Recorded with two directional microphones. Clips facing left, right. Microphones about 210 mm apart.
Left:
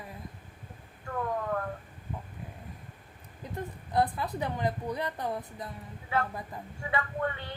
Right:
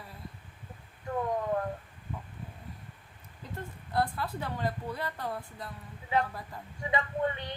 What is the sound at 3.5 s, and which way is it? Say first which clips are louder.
A woman's voice: left 3 dB; 20° left (ahead or behind).